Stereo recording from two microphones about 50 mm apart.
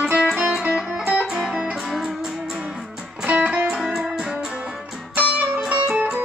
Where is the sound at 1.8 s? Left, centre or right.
Centre.